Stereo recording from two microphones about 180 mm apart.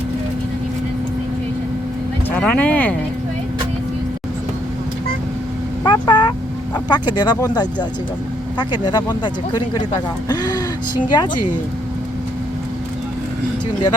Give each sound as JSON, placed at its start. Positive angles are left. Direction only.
{"t": 2.3, "sound": "speech", "side_deg": 5}
{"t": 5.8, "sound": "speech", "side_deg": 25}